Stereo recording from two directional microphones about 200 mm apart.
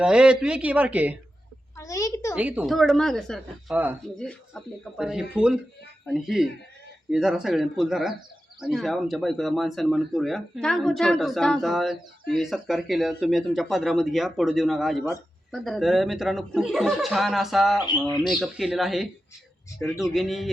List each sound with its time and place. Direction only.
0.0 s speech: 5° right (ahead or behind)
1.7 s a sound: 15° left (ahead or behind)
2.3 s speech: 10° right (ahead or behind)